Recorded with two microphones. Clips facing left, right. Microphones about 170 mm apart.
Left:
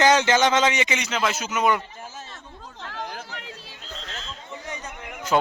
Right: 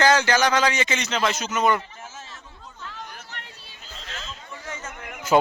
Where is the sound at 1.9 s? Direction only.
35° left (ahead or behind).